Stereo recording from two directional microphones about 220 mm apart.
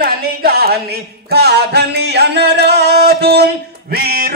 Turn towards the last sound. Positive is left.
turn(degrees=-45)  # may be behind; listen again after turning